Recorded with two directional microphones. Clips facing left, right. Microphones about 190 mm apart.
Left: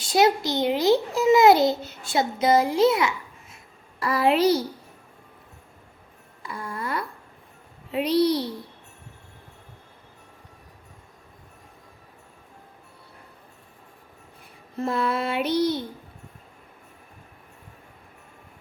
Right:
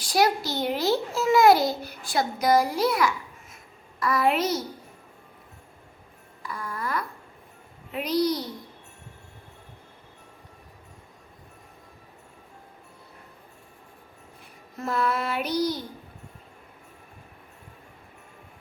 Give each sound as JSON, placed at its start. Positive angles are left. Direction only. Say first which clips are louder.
{"t": 0.0, "sound": "a child's voice", "louder": "left 3 dB", "side_deg": 25}
{"t": 6.4, "sound": "babbling", "louder": "left 1 dB", "side_deg": 25}
{"t": 7.9, "sound": "a child's voice", "louder": "left 4 dB", "side_deg": 30}
{"t": 14.8, "sound": "a child's voice", "louder": "left 2 dB", "side_deg": 30}